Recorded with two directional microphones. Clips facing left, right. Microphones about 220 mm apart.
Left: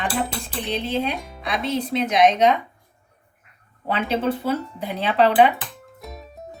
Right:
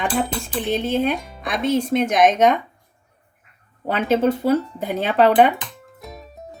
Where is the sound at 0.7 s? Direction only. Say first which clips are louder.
Right 4 dB; 50° right (ahead or behind).